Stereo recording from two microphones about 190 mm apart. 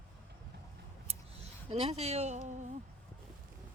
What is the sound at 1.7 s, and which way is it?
Speech, 35° right (ahead or behind).